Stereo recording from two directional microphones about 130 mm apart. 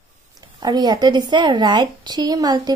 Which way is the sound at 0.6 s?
30° right (ahead or behind).